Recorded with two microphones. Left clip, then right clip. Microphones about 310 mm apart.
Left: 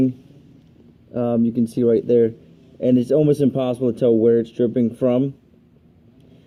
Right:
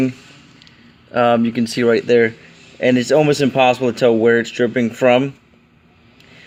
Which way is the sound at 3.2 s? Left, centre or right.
Right.